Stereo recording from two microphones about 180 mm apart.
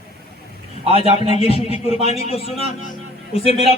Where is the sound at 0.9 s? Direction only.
30° left (ahead or behind).